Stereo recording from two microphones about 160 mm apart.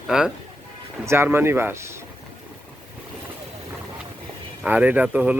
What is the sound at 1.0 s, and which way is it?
Speech, 15° right (ahead or behind).